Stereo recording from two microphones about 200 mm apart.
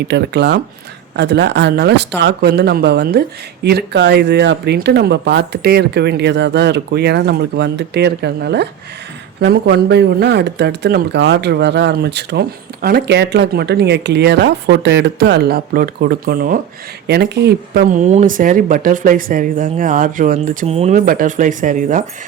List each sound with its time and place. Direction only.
0.0 s speech: 55° right (ahead or behind)
17.8 s speech: 40° right (ahead or behind)